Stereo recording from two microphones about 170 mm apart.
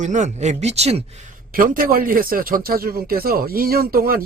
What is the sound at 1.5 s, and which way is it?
Speech, 55° right (ahead or behind).